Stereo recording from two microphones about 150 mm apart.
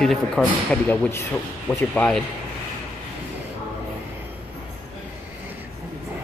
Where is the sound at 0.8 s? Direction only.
10° left (ahead or behind).